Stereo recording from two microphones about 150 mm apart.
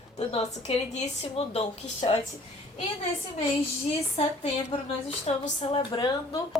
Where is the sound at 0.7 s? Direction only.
40° left (ahead or behind).